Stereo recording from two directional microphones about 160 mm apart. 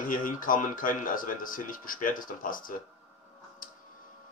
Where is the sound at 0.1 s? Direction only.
60° left (ahead or behind).